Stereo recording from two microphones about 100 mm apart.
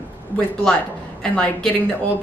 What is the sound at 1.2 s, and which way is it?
Speech, 10° left (ahead or behind).